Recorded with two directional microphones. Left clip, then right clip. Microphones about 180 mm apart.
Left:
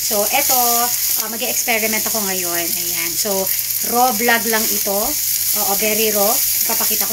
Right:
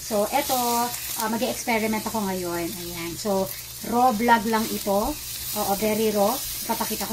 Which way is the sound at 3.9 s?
Centre (ahead or behind).